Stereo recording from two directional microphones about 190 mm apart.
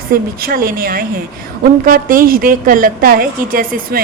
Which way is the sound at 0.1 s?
50° right (ahead or behind).